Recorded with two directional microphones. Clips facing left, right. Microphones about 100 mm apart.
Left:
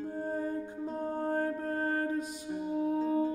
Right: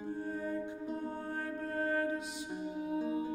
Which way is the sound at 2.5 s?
15° right (ahead or behind).